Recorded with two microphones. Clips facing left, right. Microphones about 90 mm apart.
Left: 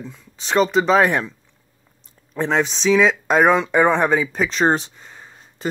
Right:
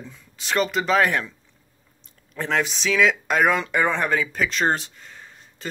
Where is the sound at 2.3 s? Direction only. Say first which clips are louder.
Left 4 dB; 25° left (ahead or behind).